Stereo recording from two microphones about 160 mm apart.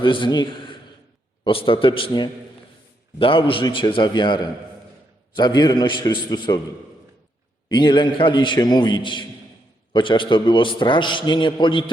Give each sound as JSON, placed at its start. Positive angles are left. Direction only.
{"t": 0.0, "sound": "a man's voice", "side_deg": 30}
{"t": 7.7, "sound": "a man's voice", "side_deg": 30}